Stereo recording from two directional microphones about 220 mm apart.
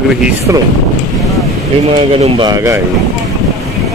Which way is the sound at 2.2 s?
20° right (ahead or behind).